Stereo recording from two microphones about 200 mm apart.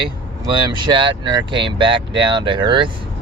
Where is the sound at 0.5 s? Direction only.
25° right (ahead or behind).